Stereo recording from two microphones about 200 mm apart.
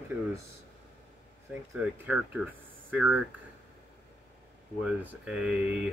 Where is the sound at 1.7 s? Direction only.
5° right (ahead or behind).